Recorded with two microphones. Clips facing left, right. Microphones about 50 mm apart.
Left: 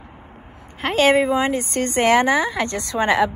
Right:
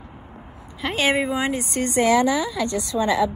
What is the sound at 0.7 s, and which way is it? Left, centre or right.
A woman's voice, left.